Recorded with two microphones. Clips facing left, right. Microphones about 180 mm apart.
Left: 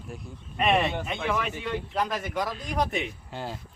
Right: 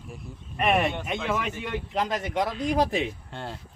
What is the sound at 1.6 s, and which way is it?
Speech, 20° right (ahead or behind).